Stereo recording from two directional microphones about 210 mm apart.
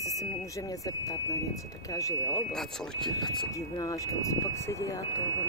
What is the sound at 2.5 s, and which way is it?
Speech, 5° left (ahead or behind).